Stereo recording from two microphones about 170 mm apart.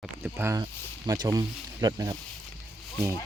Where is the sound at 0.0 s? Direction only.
10° right (ahead or behind).